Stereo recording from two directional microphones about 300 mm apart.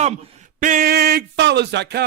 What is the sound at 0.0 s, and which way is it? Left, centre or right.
Speech, right.